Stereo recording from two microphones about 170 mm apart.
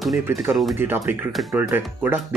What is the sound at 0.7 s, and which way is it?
Speech, 15° right (ahead or behind).